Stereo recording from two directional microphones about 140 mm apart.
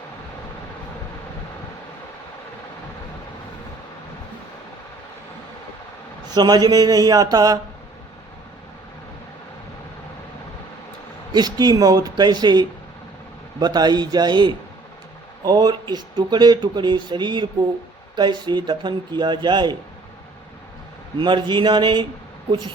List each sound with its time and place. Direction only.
6.3 s speech: 30° right (ahead or behind)
11.3 s speech: 30° right (ahead or behind)
21.2 s speech: 35° right (ahead or behind)